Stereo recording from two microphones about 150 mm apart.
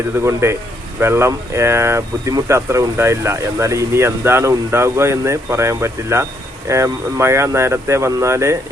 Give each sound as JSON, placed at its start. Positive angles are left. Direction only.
{"t": 0.2, "sound": "speech", "side_deg": -20}